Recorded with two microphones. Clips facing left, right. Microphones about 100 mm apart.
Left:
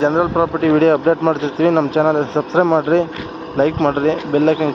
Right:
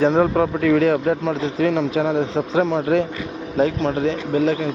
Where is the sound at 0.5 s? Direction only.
45° left (ahead or behind).